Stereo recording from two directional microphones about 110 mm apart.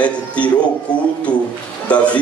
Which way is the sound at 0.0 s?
10° left (ahead or behind).